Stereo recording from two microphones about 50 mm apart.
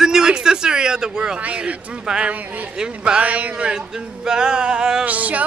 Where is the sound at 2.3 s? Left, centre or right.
Right.